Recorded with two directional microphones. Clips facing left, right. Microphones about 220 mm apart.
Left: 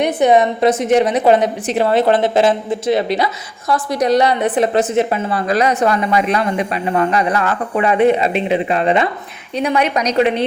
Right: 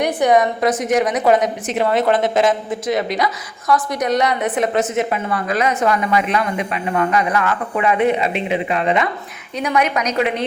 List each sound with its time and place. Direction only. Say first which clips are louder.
0.0 s a woman's voice: left 2 dB; 25° left (ahead or behind)